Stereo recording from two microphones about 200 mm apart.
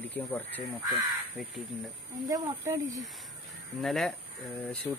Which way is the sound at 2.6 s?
15° right (ahead or behind).